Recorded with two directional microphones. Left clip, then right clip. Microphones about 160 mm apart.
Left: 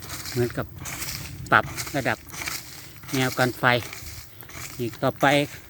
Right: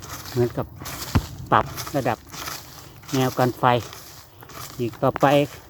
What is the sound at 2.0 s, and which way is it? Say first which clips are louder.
Speech: right 2 dB; 5° right (ahead or behind).